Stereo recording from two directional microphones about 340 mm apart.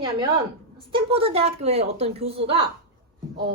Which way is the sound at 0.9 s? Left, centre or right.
Centre.